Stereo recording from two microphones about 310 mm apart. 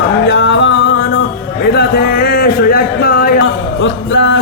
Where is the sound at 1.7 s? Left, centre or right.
Left.